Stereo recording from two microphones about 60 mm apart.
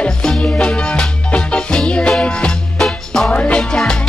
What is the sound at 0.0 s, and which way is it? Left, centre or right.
Music, centre.